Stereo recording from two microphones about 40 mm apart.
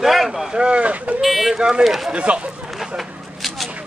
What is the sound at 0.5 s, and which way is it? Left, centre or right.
Speech, right.